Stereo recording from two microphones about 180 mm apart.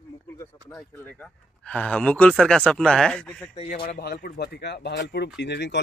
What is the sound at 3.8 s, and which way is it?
Speech, 60° left (ahead or behind).